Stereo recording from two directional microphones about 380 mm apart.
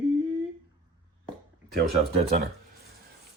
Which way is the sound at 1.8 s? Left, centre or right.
Centre.